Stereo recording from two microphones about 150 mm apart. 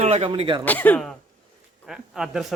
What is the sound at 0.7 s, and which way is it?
Speech, 10° left (ahead or behind).